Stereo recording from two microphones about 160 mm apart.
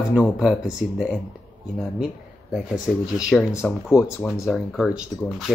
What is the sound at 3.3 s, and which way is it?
Speech, 15° left (ahead or behind).